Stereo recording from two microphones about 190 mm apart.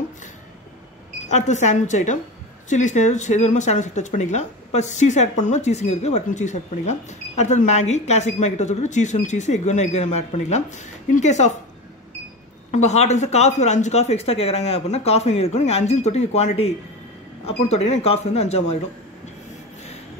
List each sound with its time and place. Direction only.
1.3 s speech: 40° left (ahead or behind)
12.7 s speech: 35° left (ahead or behind)